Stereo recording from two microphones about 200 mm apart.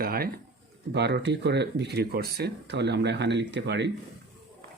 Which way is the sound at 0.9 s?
60° right (ahead or behind).